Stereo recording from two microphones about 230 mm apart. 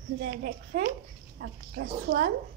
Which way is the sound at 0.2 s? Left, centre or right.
Right.